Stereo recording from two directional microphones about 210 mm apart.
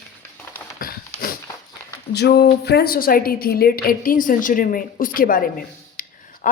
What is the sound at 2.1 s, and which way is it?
A woman's voice, 50° left (ahead or behind).